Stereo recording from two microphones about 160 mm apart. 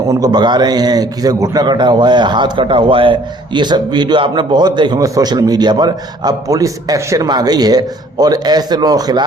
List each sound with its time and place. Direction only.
0.1 s a man's voice: 25° right (ahead or behind)